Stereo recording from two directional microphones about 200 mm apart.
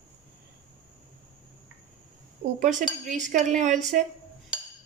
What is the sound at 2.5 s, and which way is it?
Speech, 40° right (ahead or behind).